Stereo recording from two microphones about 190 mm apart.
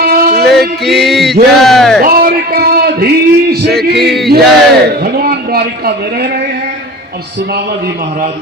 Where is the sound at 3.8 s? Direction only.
60° right (ahead or behind).